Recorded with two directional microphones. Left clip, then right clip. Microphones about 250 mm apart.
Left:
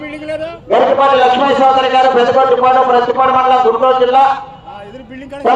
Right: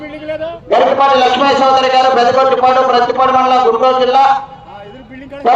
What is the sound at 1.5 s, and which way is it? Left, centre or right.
Speech, right.